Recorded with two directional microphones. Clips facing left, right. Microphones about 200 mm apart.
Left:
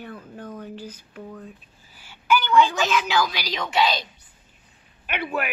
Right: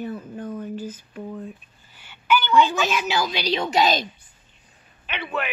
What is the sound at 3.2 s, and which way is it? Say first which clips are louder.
Speech: right 4 dB; 25° right (ahead or behind).